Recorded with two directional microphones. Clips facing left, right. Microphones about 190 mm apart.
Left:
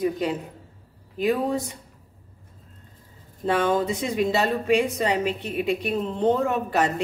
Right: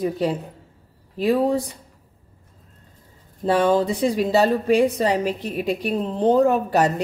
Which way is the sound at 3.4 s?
35° right (ahead or behind).